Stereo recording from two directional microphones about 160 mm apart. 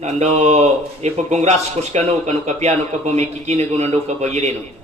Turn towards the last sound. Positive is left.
turn(degrees=-45)  # may be behind; listen again after turning